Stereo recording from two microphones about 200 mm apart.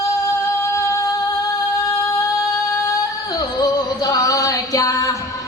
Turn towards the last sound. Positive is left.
turn(degrees=15)  # may be behind; listen again after turning